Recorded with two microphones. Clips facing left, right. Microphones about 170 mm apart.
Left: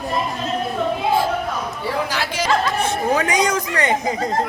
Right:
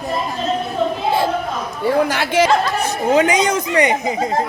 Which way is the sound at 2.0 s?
55° right (ahead or behind).